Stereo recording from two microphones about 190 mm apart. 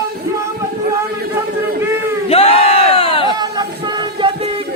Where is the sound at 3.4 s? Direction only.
20° right (ahead or behind).